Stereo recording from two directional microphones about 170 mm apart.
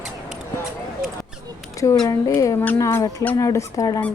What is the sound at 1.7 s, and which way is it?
Speech, 20° left (ahead or behind).